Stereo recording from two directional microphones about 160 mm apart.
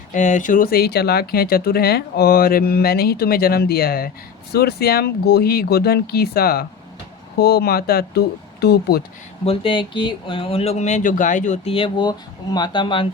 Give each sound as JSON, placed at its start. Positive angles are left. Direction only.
{"t": 0.1, "sound": "speech", "side_deg": 50}
{"t": 7.3, "sound": "speech", "side_deg": 85}
{"t": 9.4, "sound": "speech", "side_deg": 35}